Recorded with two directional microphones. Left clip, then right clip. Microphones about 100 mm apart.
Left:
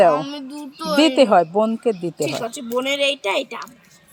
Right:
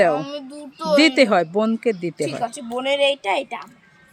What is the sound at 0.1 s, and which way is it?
Speech, 35° right (ahead or behind).